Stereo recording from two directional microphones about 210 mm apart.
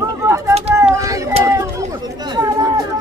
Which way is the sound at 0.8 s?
15° right (ahead or behind).